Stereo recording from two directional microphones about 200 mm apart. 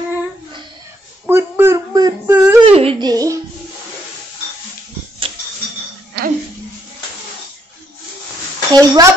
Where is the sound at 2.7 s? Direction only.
30° right (ahead or behind).